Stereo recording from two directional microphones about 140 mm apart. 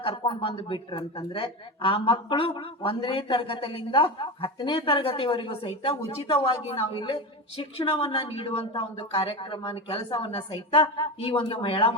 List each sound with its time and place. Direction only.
0.0 s a woman's voice: 35° left (ahead or behind)